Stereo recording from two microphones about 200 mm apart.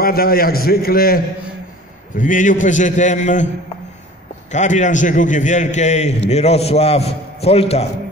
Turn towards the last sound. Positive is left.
turn(degrees=30)  # may be behind; listen again after turning